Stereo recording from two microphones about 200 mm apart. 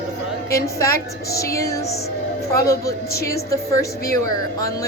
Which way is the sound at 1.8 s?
55° left (ahead or behind).